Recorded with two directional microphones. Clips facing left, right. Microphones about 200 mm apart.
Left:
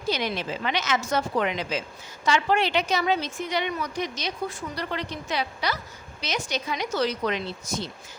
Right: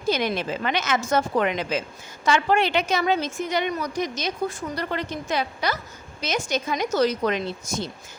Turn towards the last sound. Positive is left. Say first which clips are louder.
# right 3 dB
turn(degrees=-45)  # may be behind; listen again after turning